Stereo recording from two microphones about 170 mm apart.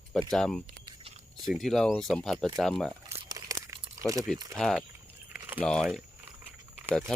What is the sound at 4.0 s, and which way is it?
Speech, 20° right (ahead or behind).